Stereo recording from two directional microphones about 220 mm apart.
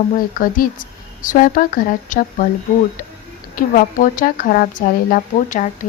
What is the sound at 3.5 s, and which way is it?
Speech, 40° left (ahead or behind).